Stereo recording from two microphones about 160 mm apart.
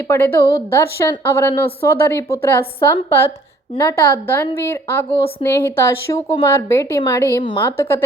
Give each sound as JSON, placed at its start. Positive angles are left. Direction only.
{"t": 0.1, "sound": "a woman's voice", "side_deg": 15}